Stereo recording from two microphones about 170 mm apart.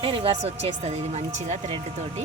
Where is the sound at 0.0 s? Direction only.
35° right (ahead or behind).